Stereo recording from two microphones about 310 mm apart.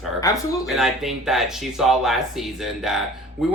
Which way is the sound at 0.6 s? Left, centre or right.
Centre.